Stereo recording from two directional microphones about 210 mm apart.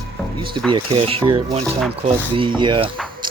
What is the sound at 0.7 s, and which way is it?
Speech, 25° right (ahead or behind).